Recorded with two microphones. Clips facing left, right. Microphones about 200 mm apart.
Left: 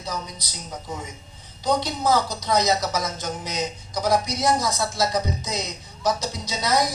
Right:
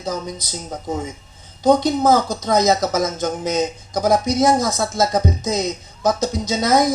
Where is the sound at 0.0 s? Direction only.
50° right (ahead or behind).